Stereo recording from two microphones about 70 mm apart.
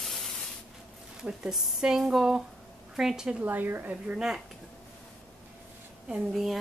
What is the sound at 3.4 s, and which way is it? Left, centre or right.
Speech, right.